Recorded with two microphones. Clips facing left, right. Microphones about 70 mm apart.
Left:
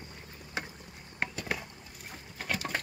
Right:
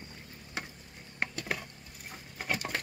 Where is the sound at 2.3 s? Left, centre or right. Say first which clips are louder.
Even; centre.